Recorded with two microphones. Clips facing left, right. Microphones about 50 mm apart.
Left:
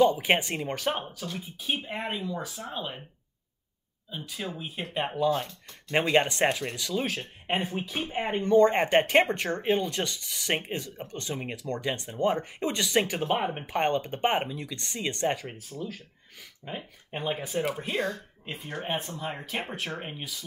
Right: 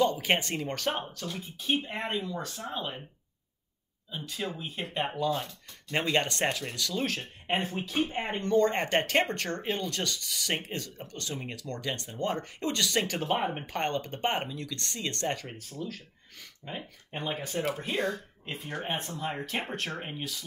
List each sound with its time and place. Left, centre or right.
0.0 s speech: centre
4.3 s speech: centre
13.7 s speech: centre